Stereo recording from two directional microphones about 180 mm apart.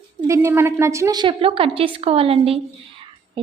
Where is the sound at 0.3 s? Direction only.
15° right (ahead or behind).